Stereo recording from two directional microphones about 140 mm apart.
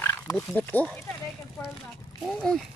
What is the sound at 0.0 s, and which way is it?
Oink, 15° left (ahead or behind).